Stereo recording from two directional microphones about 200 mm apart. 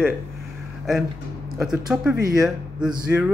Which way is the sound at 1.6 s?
5° right (ahead or behind).